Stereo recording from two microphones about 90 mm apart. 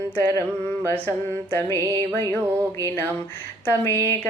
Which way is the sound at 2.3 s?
25° right (ahead or behind).